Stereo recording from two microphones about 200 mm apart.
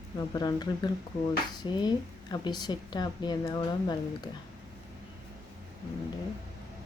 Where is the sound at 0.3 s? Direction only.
20° left (ahead or behind).